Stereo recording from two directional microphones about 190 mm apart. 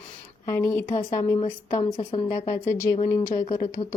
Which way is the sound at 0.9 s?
25° left (ahead or behind).